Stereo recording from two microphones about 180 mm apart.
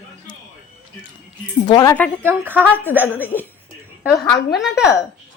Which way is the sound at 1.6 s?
20° left (ahead or behind).